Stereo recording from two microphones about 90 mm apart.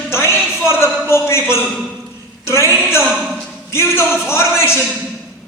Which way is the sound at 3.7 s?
30° left (ahead or behind).